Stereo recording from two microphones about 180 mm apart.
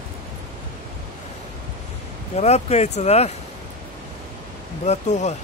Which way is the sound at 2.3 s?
35° left (ahead or behind).